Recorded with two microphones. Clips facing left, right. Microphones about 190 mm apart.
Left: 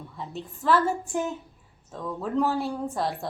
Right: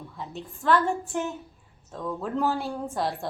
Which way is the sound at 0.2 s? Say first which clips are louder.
Left 2 dB; centre (ahead or behind).